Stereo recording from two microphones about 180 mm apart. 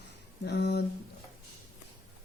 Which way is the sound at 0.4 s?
70° left (ahead or behind).